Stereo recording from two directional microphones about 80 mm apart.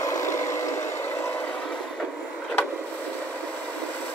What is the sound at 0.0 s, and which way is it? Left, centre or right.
Vehicle, left.